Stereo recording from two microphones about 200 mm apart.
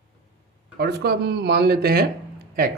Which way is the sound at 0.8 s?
50° right (ahead or behind).